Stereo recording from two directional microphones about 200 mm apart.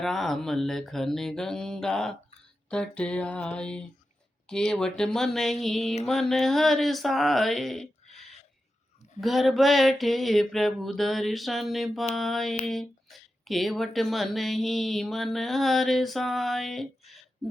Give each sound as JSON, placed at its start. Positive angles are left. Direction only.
{"t": 0.0, "sound": "speech", "side_deg": 0}